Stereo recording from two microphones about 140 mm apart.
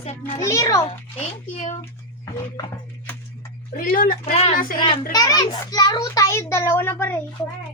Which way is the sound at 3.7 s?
90° left.